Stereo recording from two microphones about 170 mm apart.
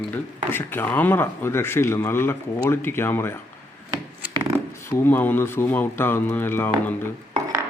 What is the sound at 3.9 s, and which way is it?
Wood, 25° right (ahead or behind).